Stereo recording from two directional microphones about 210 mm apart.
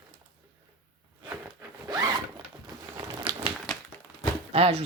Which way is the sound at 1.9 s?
20° right (ahead or behind).